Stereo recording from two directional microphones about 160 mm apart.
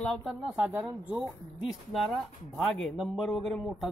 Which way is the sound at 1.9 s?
Centre (ahead or behind).